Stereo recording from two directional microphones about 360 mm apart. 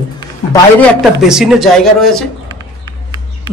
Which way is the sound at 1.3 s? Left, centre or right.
Centre.